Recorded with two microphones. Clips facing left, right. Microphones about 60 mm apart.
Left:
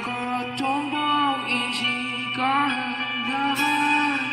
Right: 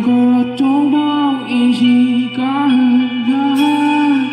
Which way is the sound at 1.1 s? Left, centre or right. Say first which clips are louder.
Right 7 dB; left.